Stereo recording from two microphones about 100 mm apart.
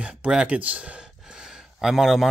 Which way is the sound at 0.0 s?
10° right (ahead or behind).